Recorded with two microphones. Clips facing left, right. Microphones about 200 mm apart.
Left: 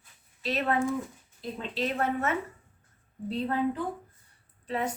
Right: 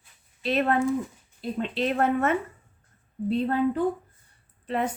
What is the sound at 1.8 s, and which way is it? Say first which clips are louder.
Speech: right 5 dB; 55° right (ahead or behind).